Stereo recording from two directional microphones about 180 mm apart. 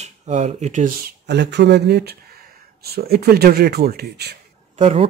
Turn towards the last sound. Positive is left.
turn(degrees=-40)  # may be behind; listen again after turning